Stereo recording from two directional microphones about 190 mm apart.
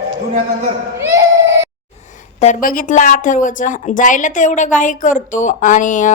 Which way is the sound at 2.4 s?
45° left (ahead or behind).